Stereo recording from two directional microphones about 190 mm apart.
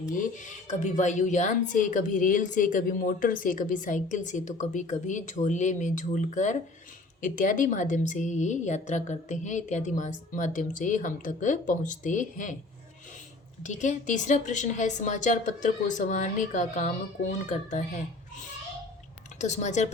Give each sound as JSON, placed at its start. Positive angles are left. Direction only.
{"t": 0.1, "sound": "speech", "side_deg": 45}
{"t": 13.6, "sound": "speech", "side_deg": 40}
{"t": 19.4, "sound": "speech", "side_deg": 40}